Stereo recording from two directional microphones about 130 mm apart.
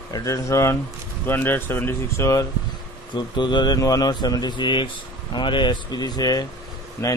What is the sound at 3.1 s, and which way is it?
Speech, 35° left (ahead or behind).